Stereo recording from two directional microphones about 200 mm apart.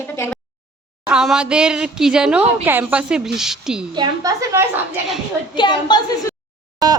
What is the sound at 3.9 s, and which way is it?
Speech, 20° right (ahead or behind).